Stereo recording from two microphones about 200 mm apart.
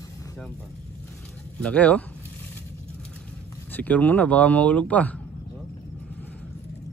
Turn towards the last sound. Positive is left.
turn(degrees=5)  # may be behind; listen again after turning